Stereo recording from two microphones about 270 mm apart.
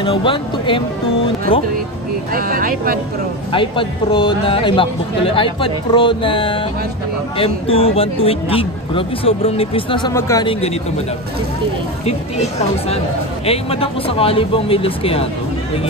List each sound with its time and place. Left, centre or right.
0.0 s a man's voice: centre
2.3 s speech: right
3.5 s a man's voice: centre
12.1 s a man's voice: left